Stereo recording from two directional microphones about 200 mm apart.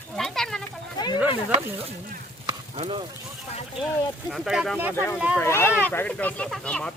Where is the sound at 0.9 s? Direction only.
20° left (ahead or behind).